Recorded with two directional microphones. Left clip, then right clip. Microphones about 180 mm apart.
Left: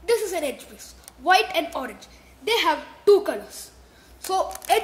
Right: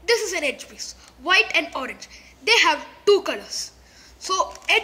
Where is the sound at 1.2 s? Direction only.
15° left (ahead or behind).